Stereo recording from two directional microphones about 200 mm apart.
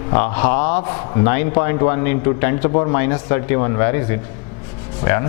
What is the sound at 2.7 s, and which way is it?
Speech, 30° left (ahead or behind).